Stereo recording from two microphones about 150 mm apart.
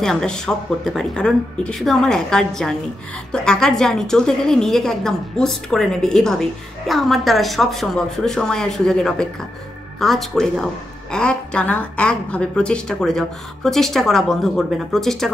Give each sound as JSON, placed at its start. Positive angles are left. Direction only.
{"t": 0.0, "sound": "a woman's voice", "side_deg": 5}